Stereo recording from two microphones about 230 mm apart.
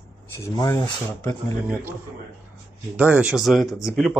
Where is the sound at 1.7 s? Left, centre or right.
Centre.